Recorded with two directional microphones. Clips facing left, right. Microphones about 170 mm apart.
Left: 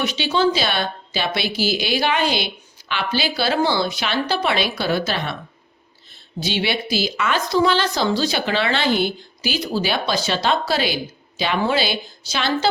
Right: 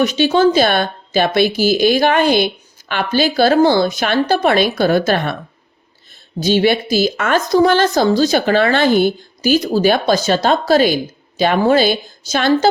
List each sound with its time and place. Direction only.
0.0 s speech: 45° right (ahead or behind)
6.4 s speech: 45° right (ahead or behind)